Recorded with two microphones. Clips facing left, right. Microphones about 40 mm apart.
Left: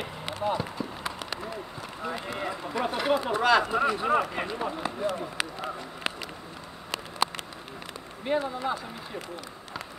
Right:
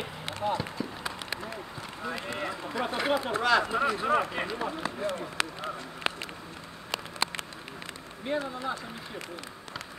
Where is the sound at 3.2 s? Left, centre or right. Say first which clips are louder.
Left 4 dB; centre.